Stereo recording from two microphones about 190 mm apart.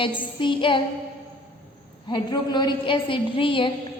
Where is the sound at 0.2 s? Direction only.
25° left (ahead or behind).